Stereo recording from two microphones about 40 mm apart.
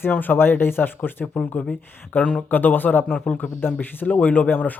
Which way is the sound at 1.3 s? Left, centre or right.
Left.